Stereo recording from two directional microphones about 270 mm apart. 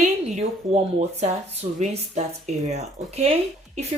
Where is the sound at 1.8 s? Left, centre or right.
Right.